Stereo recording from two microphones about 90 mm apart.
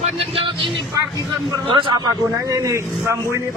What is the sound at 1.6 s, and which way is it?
Speech, 65° right (ahead or behind).